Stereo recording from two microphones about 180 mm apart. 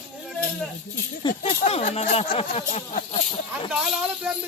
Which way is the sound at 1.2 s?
35° left (ahead or behind).